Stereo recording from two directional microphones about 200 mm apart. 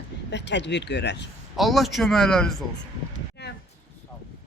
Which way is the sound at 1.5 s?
Centre (ahead or behind).